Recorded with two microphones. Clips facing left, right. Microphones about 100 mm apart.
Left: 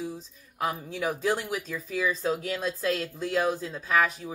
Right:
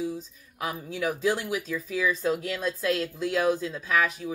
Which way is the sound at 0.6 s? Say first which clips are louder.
Left 1 dB; 30° left (ahead or behind).